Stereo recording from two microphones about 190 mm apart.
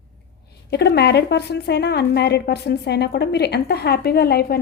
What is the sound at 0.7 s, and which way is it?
A woman's voice, 60° left (ahead or behind).